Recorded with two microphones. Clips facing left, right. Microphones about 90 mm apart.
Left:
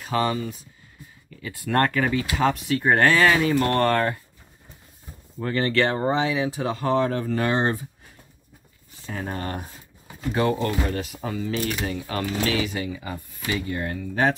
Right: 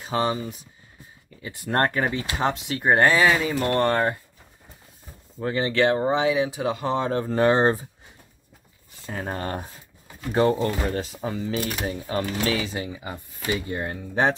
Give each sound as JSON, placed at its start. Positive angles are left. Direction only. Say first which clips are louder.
{"t": 0.0, "sound": "speech", "louder": "left 1 dB", "side_deg": -25}
{"t": 5.4, "sound": "speech", "louder": "right 1 dB", "side_deg": -15}
{"t": 9.0, "sound": "speech", "louder": "right 1 dB", "side_deg": -35}
{"t": 11.8, "sound": "speech", "louder": "right 1 dB", "side_deg": -25}